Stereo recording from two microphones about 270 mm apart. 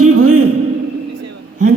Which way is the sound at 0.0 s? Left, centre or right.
Right.